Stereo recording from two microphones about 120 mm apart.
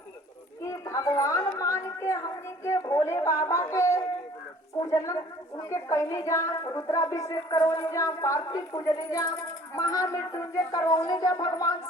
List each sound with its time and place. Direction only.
0.6 s speech: 25° left (ahead or behind)